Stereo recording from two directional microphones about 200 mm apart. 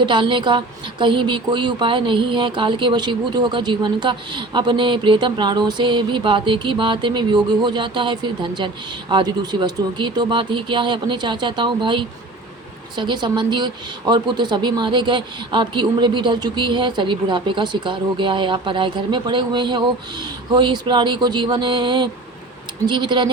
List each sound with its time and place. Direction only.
0.0 s a woman's voice: 25° right (ahead or behind)